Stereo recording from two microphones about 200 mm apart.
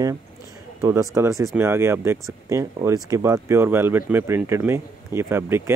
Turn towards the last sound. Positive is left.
turn(degrees=-10)  # may be behind; listen again after turning